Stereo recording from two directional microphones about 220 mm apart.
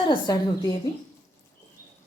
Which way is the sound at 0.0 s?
20° left (ahead or behind).